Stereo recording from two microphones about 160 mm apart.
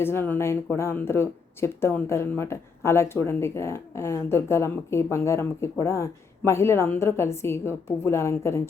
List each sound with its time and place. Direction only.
0.0 s speech: 15° left (ahead or behind)